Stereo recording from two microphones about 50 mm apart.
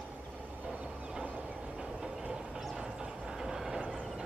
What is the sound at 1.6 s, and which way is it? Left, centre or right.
Train, centre.